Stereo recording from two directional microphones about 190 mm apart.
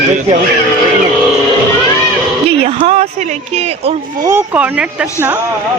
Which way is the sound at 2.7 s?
30° right (ahead or behind).